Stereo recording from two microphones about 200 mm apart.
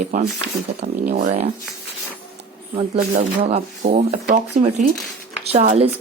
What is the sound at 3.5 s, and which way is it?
A woman's voice, 30° right (ahead or behind).